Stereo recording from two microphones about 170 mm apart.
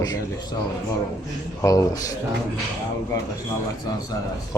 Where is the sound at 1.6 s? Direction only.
20° left (ahead or behind).